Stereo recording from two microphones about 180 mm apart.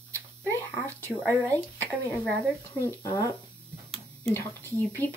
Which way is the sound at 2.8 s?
15° left (ahead or behind).